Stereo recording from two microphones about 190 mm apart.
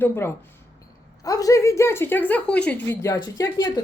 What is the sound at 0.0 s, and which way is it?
Speech, 10° left (ahead or behind).